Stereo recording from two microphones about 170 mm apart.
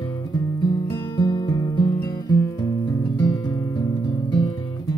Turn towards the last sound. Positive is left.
turn(degrees=20)  # may be behind; listen again after turning